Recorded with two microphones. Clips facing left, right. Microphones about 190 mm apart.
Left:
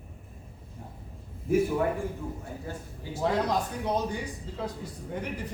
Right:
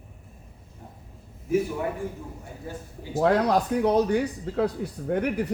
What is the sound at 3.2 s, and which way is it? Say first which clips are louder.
Speech: right 6 dB; 65° right (ahead or behind).